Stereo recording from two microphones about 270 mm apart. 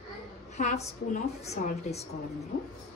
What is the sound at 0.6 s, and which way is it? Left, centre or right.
A woman's voice, left.